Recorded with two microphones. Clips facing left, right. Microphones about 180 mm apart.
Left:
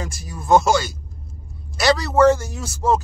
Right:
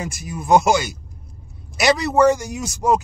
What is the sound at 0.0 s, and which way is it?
Speech, 20° right (ahead or behind).